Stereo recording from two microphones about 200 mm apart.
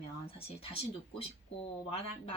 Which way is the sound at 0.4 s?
30° left (ahead or behind).